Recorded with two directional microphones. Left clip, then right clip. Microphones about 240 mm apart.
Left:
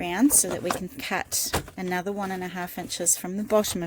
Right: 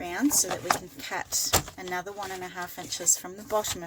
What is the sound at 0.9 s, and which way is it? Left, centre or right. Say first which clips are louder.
Speech: left 3 dB; left.